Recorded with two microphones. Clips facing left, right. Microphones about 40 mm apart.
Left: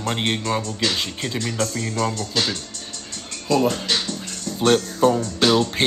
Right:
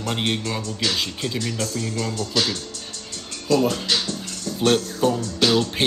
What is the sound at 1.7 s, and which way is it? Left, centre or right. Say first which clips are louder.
Speech: left 2 dB; left.